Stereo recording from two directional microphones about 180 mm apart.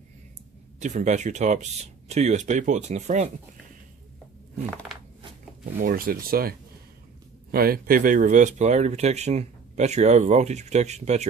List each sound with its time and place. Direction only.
0.7 s speech: 40° right (ahead or behind)
5.8 s speech: 50° right (ahead or behind)
7.5 s speech: 55° right (ahead or behind); by 11.2 s 40° right (ahead or behind)